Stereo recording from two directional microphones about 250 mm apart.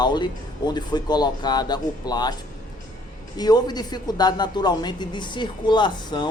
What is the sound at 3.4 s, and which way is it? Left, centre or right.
Speech, centre.